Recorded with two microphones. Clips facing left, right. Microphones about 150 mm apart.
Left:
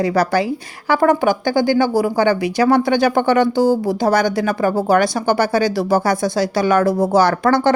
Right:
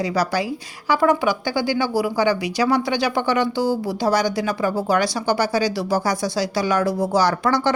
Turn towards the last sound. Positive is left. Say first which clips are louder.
# left 5 dB
turn(degrees=55)  # may be behind; listen again after turning